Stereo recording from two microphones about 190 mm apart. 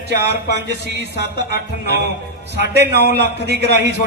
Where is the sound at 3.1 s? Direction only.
60° right (ahead or behind).